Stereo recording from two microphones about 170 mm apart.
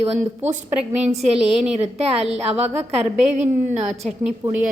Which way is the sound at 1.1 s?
40° right (ahead or behind).